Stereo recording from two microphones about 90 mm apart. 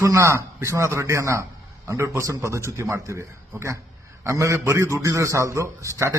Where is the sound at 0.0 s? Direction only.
35° right (ahead or behind).